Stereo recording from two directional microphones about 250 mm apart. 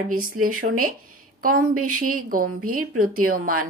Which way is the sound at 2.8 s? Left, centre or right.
Right.